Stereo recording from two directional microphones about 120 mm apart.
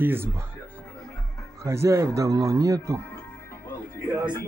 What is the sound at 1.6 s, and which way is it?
Speech, 25° right (ahead or behind).